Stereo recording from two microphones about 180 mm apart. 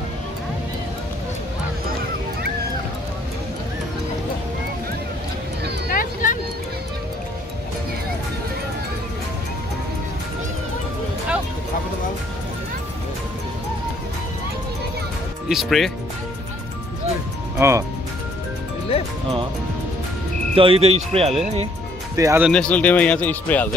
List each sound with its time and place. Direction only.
5.9 s a sound: 50° left (ahead or behind)
15.4 s speech: centre (ahead or behind)
17.6 s speech: 15° right (ahead or behind)
20.5 s speech: 30° right (ahead or behind)
22.1 s speech: 15° right (ahead or behind)
22.5 s speech: 5° left (ahead or behind)